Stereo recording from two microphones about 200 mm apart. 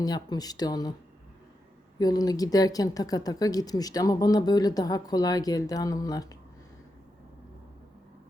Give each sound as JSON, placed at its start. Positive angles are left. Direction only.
{"t": 0.0, "sound": "a woman's voice", "side_deg": 20}
{"t": 2.0, "sound": "a woman's voice", "side_deg": 20}